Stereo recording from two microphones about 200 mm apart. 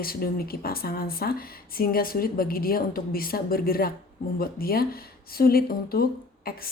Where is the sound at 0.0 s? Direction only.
50° left (ahead or behind).